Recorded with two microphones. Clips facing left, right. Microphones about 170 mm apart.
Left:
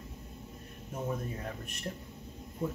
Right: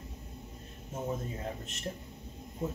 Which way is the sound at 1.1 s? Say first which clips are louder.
Even; 25° right (ahead or behind).